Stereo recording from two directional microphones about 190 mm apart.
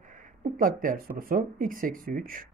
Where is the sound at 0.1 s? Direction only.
40° right (ahead or behind).